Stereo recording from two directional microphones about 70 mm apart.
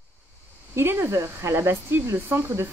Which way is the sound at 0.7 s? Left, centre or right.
Right.